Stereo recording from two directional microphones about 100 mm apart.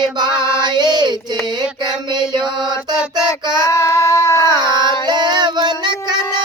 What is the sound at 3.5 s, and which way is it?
Child singing, 30° left (ahead or behind).